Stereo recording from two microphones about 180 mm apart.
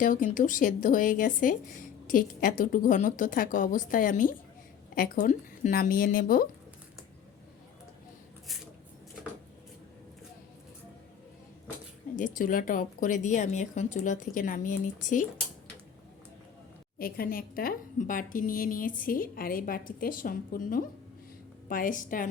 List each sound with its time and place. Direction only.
0.0 s speech: 50° left (ahead or behind)
12.1 s speech: 45° left (ahead or behind)
17.0 s speech: 55° left (ahead or behind)